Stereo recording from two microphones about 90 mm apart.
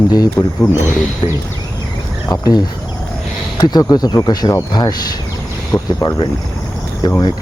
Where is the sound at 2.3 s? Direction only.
45° left (ahead or behind).